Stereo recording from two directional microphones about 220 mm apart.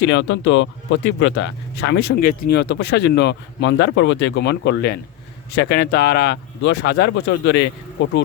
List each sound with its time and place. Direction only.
0.0 s speech: 60° left (ahead or behind)